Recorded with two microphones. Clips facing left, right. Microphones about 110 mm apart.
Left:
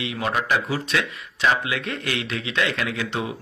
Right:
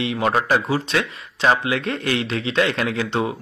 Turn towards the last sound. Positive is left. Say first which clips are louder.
# right 5 dB
turn(degrees=-35)  # may be behind; listen again after turning